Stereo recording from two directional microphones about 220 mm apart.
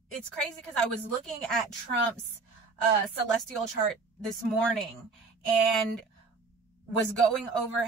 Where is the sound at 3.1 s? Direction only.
Centre (ahead or behind).